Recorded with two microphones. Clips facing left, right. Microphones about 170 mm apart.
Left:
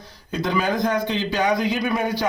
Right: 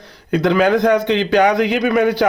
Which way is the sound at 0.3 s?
70° right (ahead or behind).